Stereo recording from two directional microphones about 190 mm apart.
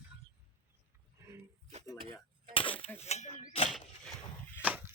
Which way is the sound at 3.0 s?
35° left (ahead or behind).